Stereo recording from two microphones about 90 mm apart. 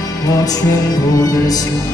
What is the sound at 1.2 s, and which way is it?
Music, 45° left (ahead or behind).